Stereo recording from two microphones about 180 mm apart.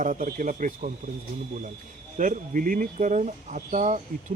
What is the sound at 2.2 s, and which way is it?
Speech, 45° right (ahead or behind).